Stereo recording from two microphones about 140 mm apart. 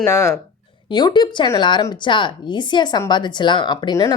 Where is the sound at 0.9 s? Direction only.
30° left (ahead or behind).